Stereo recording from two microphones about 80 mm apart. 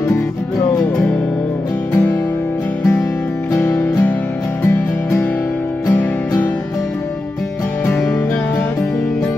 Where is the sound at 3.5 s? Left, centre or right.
Left.